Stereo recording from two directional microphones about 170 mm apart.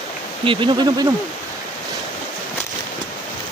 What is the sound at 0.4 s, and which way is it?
Speech, 30° right (ahead or behind).